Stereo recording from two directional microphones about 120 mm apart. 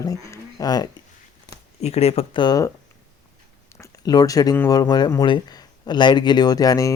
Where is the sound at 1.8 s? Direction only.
60° left (ahead or behind).